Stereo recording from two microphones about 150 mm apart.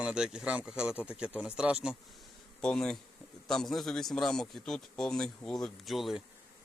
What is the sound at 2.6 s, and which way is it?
A man's voice, 5° left (ahead or behind).